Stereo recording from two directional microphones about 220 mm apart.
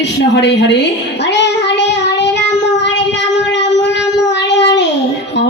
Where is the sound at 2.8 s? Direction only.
50° left (ahead or behind).